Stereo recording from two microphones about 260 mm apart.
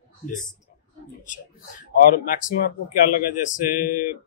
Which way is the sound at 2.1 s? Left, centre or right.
Left.